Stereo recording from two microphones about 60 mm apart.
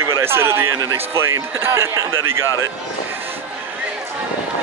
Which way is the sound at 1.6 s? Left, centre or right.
Right.